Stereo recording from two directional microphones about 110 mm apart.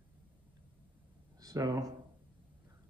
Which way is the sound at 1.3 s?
35° right (ahead or behind).